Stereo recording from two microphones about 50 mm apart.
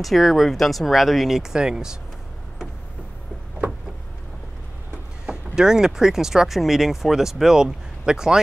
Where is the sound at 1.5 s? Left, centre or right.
Centre.